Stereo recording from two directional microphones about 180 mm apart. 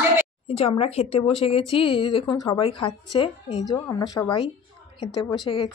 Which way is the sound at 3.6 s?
20° left (ahead or behind).